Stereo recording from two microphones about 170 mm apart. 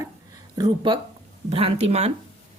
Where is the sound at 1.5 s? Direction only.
35° right (ahead or behind).